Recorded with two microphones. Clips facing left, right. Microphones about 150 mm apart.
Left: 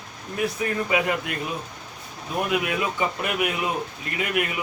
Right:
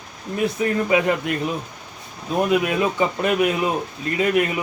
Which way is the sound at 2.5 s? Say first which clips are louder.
Right 5 dB; 30° right (ahead or behind).